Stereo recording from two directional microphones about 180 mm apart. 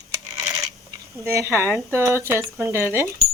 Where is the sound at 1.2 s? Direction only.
15° right (ahead or behind).